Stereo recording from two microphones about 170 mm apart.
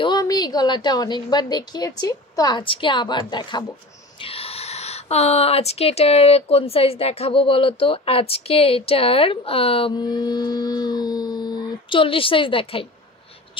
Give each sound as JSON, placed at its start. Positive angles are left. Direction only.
{"t": 0.0, "sound": "a woman's voice", "side_deg": 25}